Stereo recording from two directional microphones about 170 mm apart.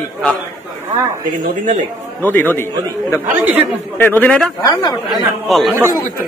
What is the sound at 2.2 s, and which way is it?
Speech, 10° left (ahead or behind).